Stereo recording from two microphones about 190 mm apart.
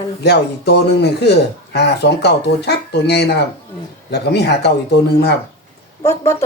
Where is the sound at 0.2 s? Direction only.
60° left (ahead or behind).